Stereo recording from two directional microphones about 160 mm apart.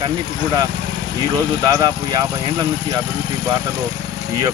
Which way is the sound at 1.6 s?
25° right (ahead or behind).